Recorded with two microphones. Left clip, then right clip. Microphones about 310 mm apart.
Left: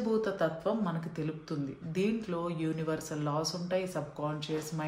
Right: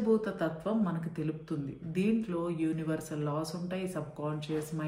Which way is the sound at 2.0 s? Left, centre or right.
Left.